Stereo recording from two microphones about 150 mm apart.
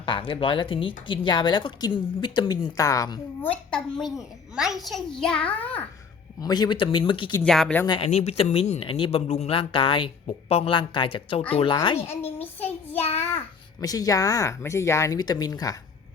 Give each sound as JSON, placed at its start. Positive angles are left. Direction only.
{"t": 0.0, "sound": "speech", "side_deg": 35}
{"t": 3.4, "sound": "a child's voice", "side_deg": 5}
{"t": 6.4, "sound": "speech", "side_deg": 25}
{"t": 7.4, "sound": "a child's voice", "side_deg": 5}
{"t": 7.9, "sound": "speech", "side_deg": 40}
{"t": 12.0, "sound": "a child's voice", "side_deg": 15}
{"t": 12.6, "sound": "child singing", "side_deg": 10}
{"t": 13.8, "sound": "speech", "side_deg": 25}